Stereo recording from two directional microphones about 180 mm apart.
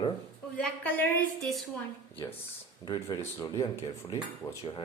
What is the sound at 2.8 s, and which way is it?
Speech, 25° left (ahead or behind).